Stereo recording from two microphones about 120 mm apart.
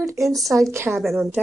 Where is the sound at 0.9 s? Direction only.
Centre (ahead or behind).